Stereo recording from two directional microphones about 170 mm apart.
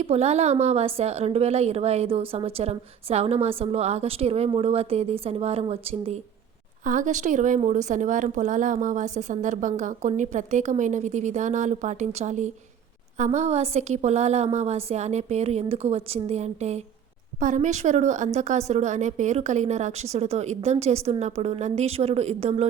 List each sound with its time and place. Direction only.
0.0 s a woman's voice: 40° right (ahead or behind)
6.8 s a woman's voice: 50° right (ahead or behind)